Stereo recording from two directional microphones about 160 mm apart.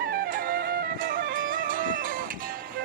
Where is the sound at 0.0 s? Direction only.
65° right (ahead or behind).